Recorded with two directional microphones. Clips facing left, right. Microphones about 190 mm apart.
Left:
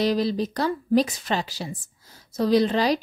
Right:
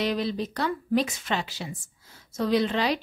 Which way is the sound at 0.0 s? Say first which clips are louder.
Left 4 dB; 35° left (ahead or behind).